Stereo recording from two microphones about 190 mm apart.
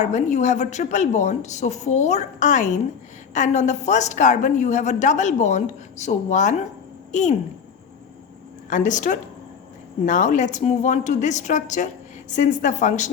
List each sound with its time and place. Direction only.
0.0 s a woman's voice: 40° left (ahead or behind)
8.7 s a woman's voice: 40° left (ahead or behind)